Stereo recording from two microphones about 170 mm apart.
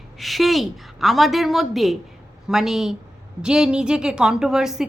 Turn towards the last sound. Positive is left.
turn(degrees=0)  # may be behind; listen again after turning